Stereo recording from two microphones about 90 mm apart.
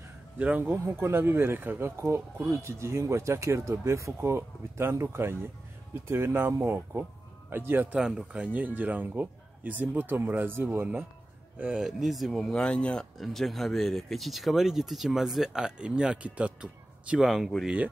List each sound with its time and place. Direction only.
0.4 s speech: 20° right (ahead or behind)
0.8 s speech: 30° right (ahead or behind)
8.0 s speech: 10° right (ahead or behind)
11.8 s speech: centre (ahead or behind)
17.2 s speech: centre (ahead or behind)